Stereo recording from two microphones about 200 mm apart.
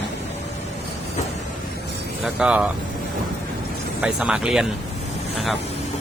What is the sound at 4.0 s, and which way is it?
Speech, 5° right (ahead or behind).